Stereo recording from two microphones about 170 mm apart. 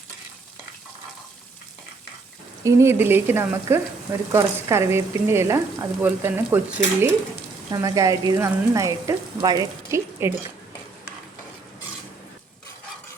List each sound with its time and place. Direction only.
2.6 s speech: 15° right (ahead or behind)